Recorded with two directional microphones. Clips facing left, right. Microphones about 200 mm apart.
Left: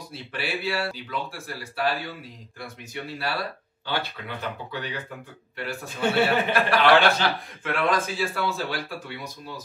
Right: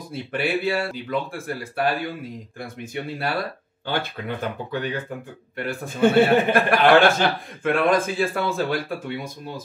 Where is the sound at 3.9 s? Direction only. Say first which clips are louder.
Right 4 dB; 50° right (ahead or behind).